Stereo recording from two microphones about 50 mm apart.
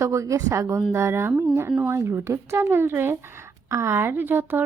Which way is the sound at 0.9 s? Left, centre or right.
Right.